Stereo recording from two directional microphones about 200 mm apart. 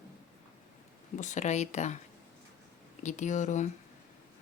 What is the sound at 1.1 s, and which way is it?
Speech, 35° left (ahead or behind).